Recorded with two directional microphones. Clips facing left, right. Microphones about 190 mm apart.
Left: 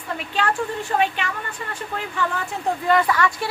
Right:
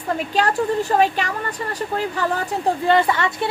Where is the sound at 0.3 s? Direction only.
40° right (ahead or behind).